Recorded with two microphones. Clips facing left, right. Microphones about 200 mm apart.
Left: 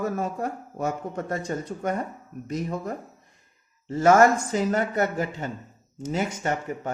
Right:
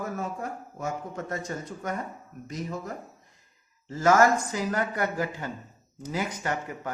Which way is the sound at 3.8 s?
30° left (ahead or behind).